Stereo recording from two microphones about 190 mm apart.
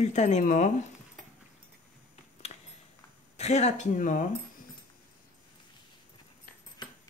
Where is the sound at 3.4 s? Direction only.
35° left (ahead or behind).